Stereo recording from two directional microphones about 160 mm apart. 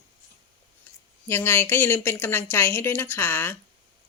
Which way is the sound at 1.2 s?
15° left (ahead or behind).